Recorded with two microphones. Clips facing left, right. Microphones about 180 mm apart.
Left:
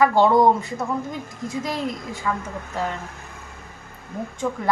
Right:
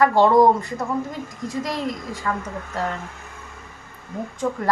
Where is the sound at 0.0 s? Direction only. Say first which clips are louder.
Right 1 dB; centre (ahead or behind).